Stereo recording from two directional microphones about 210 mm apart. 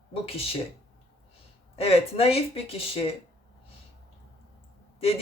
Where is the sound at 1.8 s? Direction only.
30° left (ahead or behind).